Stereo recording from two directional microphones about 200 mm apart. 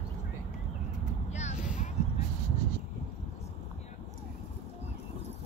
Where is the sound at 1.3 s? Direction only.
35° left (ahead or behind).